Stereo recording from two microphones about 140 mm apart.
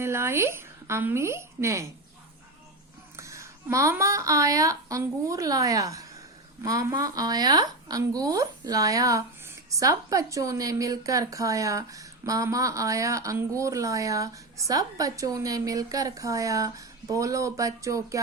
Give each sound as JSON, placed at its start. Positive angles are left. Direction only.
{"t": 0.0, "sound": "a woman's voice", "side_deg": -20}
{"t": 3.2, "sound": "a woman's voice", "side_deg": -20}